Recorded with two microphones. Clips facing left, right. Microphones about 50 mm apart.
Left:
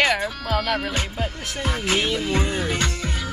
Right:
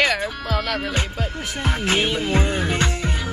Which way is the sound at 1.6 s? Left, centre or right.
Right.